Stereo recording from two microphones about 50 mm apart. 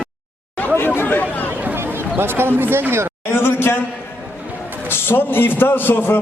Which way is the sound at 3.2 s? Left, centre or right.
Left.